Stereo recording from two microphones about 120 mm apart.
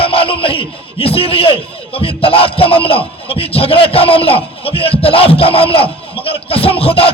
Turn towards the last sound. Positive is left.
turn(degrees=50)  # may be behind; listen again after turning